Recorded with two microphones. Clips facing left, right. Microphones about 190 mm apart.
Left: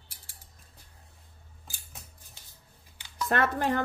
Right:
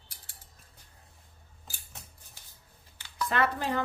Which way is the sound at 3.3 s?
50° left (ahead or behind).